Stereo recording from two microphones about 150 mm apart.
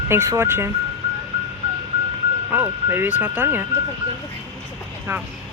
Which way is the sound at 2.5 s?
15° right (ahead or behind).